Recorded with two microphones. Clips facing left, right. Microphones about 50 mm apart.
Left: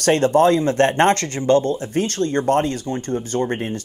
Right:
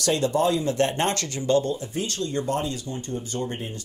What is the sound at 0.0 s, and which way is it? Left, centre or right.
Speech, left.